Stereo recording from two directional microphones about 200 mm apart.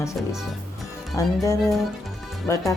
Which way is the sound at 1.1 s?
15° left (ahead or behind).